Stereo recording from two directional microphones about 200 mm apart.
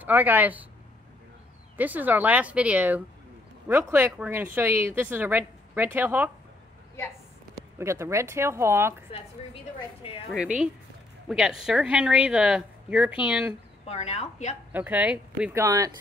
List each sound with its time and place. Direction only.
0.0 s speech: 10° right (ahead or behind)
1.8 s speech: 10° right (ahead or behind)
7.8 s speech: 15° right (ahead or behind)
10.3 s a woman's voice: 5° right (ahead or behind)
13.8 s a woman's voice: 30° left (ahead or behind)
14.7 s speech: 10° right (ahead or behind)
15.6 s speech: 15° right (ahead or behind)